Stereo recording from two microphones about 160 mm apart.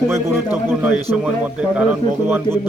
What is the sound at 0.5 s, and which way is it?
Speech, 5° right (ahead or behind).